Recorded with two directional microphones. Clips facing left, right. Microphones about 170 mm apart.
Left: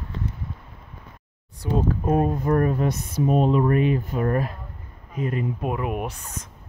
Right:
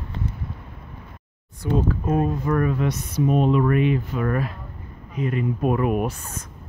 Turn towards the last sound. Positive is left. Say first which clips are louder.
# right 5 dB
turn(degrees=15)  # may be behind; listen again after turning